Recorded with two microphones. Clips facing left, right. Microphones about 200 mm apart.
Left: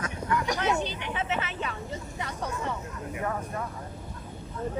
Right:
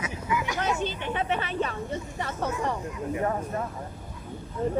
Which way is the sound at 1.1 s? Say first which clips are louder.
Right 3 dB; 35° right (ahead or behind).